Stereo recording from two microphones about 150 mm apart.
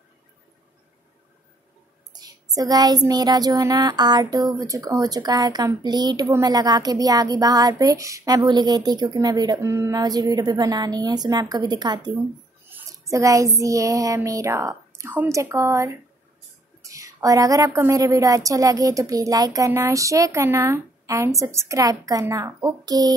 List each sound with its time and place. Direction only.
2.1 s speech: 25° right (ahead or behind)
12.6 s child singing: 15° right (ahead or behind)
16.8 s speech: 20° right (ahead or behind)